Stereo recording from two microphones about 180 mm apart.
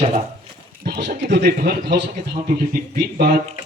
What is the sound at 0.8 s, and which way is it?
Speech, 60° right (ahead or behind).